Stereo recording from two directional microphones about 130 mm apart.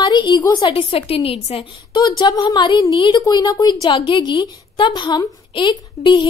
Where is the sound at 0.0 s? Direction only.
35° left (ahead or behind).